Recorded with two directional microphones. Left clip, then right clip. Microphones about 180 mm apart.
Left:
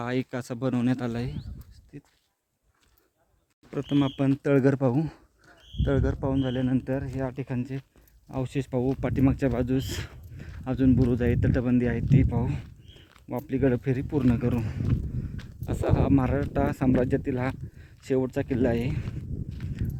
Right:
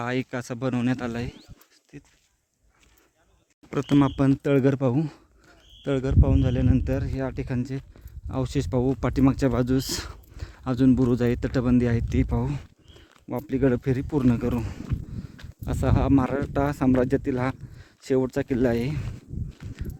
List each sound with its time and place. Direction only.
0.0 s speech: centre (ahead or behind)
3.7 s speech: 30° right (ahead or behind)
4.4 s speech: 15° right (ahead or behind)
15.6 s speech: 35° right (ahead or behind)
16.2 s speech: 30° right (ahead or behind)